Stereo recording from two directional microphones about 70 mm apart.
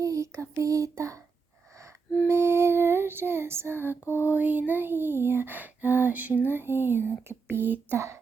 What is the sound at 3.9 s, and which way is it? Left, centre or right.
Lullaby, left.